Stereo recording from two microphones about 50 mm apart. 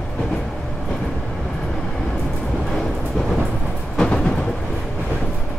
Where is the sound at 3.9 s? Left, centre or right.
Centre.